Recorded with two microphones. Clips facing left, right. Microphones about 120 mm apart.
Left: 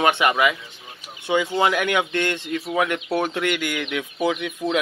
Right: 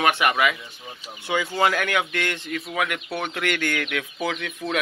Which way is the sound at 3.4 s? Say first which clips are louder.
Left 2 dB; 15° left (ahead or behind).